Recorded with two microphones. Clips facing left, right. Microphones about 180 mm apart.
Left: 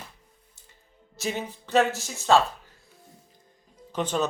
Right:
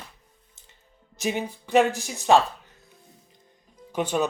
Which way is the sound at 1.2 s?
15° right (ahead or behind).